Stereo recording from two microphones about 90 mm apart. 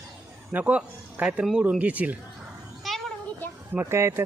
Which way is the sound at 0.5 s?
10° right (ahead or behind).